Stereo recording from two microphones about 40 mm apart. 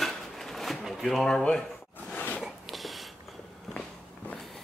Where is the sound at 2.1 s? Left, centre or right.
Left.